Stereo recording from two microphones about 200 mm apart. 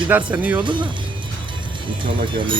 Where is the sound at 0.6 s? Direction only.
25° right (ahead or behind).